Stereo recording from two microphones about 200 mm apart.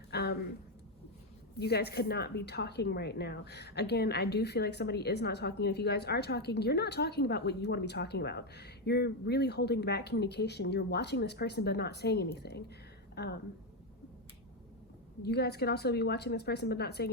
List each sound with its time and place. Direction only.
0.1 s a sound: 55° left (ahead or behind)
1.5 s a woman's voice: 55° left (ahead or behind)
15.2 s a woman's voice: 55° left (ahead or behind)